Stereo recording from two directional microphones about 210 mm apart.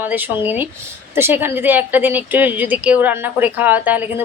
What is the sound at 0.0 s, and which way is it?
A woman's voice, 10° right (ahead or behind).